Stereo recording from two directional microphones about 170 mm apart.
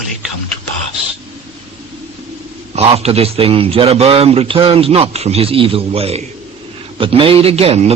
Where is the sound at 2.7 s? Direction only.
35° right (ahead or behind).